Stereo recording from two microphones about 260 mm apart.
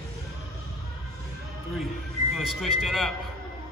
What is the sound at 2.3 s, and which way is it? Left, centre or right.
Speech, centre.